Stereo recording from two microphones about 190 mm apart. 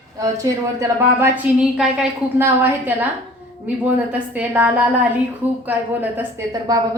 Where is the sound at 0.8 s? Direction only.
10° right (ahead or behind).